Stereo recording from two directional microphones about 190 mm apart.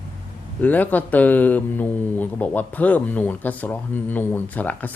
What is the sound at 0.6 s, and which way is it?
Speech, 10° left (ahead or behind).